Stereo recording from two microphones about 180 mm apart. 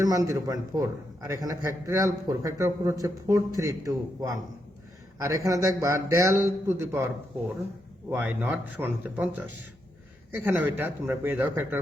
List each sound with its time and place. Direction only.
0.0 s a man's voice: 20° right (ahead or behind)
8.1 s speech: 10° right (ahead or behind)